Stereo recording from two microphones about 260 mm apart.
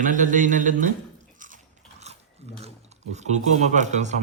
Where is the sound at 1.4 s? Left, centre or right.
Right.